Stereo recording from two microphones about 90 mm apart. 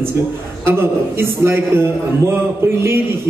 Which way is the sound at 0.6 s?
25° right (ahead or behind).